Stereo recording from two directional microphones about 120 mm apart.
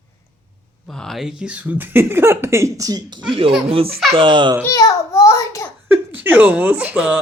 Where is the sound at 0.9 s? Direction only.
Centre (ahead or behind); by 3.2 s 30° right (ahead or behind).